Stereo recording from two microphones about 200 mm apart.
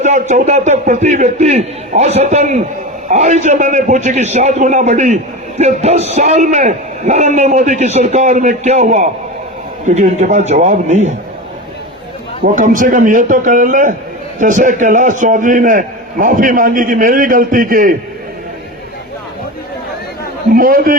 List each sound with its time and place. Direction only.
0.0 s a man's voice: 35° right (ahead or behind)
12.4 s a man's voice: 40° right (ahead or behind)
20.5 s a man's voice: 45° right (ahead or behind)